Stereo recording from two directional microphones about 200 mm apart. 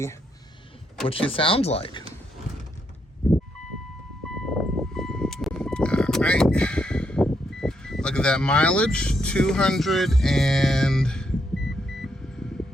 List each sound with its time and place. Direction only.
1.0 s speech: 25° left (ahead or behind)
4.4 s music: centre (ahead or behind)